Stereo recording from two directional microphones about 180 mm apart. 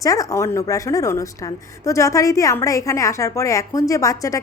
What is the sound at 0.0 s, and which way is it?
A woman's voice, 20° left (ahead or behind).